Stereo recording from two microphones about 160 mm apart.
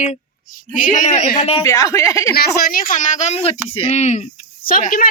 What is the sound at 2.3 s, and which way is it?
Speech, 75° left (ahead or behind).